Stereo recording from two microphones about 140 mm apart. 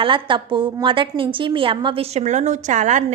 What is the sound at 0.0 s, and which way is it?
A woman's voice, 35° right (ahead or behind).